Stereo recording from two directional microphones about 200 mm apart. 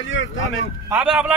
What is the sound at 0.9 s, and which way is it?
Speech, 5° right (ahead or behind).